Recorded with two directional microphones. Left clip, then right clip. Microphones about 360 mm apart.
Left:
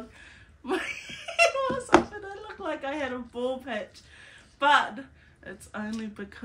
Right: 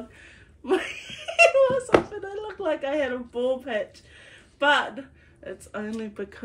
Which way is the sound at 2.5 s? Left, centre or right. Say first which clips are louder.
Right 6 dB; centre.